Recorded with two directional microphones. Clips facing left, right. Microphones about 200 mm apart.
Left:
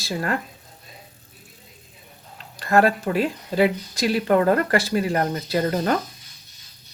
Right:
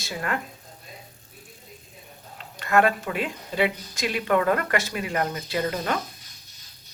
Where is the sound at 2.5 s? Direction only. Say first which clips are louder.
Left 3 dB; 35° left (ahead or behind).